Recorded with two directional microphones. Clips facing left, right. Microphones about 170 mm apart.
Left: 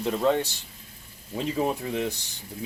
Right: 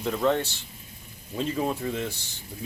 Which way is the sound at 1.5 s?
20° left (ahead or behind).